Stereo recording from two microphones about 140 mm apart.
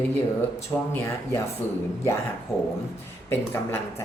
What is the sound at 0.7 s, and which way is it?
Speech, 15° left (ahead or behind).